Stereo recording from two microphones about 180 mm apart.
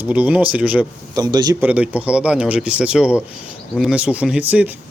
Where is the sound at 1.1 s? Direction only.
20° right (ahead or behind).